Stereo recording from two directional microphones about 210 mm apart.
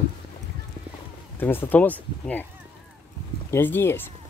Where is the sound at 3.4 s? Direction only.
10° left (ahead or behind).